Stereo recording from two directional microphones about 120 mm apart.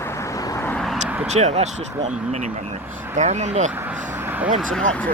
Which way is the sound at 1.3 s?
70° right (ahead or behind).